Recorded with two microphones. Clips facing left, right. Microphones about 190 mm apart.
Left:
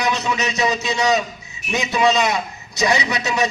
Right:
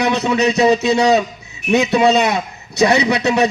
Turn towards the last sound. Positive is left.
turn(degrees=-60)  # may be behind; listen again after turning